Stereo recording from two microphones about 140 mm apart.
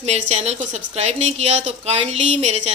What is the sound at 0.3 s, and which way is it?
A woman's voice, 55° right (ahead or behind).